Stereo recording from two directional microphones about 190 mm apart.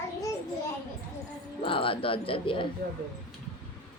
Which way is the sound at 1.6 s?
30° left (ahead or behind).